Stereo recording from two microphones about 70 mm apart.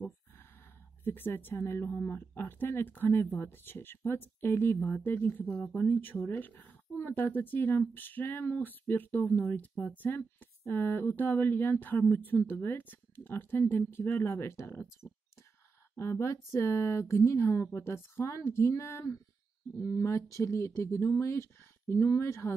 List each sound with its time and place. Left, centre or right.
1.0 s speech: left